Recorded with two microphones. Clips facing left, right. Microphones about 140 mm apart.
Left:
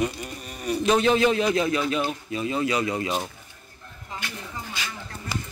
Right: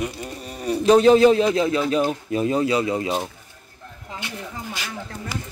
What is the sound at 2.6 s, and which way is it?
Speech, 30° right (ahead or behind).